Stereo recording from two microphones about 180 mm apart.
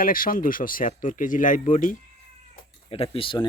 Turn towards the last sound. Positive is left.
turn(degrees=30)  # may be behind; listen again after turning